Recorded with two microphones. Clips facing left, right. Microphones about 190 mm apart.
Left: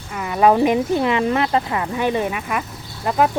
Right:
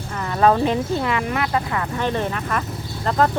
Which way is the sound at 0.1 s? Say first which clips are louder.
Left 2 dB; 10° left (ahead or behind).